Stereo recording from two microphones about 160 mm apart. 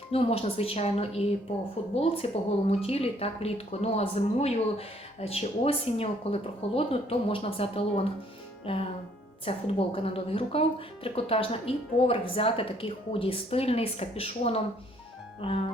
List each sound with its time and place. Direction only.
0.1 s speech: 35° left (ahead or behind)